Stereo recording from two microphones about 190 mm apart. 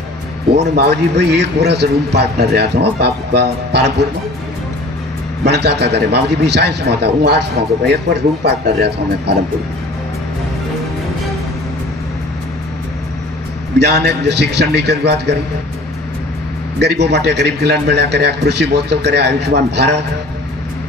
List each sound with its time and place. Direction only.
0.5 s a man's voice: 60° right (ahead or behind)
5.4 s a man's voice: 60° right (ahead or behind)
13.7 s a man's voice: 60° right (ahead or behind)
16.8 s a man's voice: 65° right (ahead or behind)